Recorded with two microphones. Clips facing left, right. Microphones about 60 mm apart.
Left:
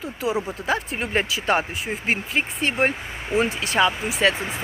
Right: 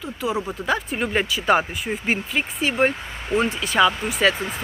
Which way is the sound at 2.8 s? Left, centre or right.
Centre.